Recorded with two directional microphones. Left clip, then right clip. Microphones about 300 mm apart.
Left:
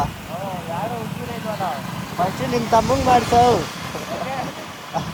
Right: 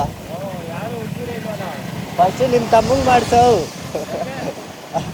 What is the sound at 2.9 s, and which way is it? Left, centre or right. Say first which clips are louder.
Speech: right 2 dB; centre.